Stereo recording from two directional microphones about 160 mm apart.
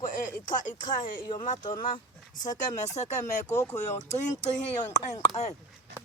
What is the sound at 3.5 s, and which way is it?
Speech, 20° left (ahead or behind).